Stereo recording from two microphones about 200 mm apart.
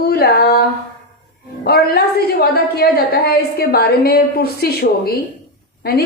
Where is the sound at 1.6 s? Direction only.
50° left (ahead or behind).